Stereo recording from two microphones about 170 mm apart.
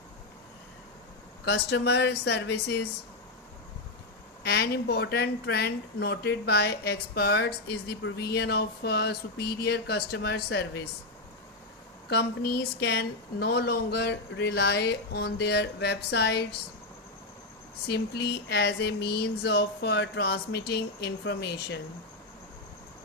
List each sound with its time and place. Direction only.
1.5 s speech: 80° left
4.4 s speech: 70° left (ahead or behind)
12.0 s speech: 75° left (ahead or behind)
17.8 s speech: 75° left (ahead or behind)